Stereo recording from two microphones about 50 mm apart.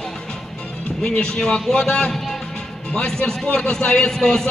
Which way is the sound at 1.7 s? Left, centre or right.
Centre.